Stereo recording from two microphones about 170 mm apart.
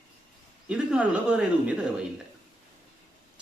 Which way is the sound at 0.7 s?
5° right (ahead or behind).